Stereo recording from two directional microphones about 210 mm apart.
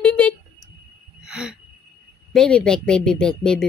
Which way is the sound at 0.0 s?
5° left (ahead or behind).